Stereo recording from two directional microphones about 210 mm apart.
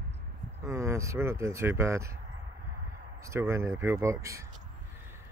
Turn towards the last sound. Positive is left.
turn(degrees=-15)  # may be behind; listen again after turning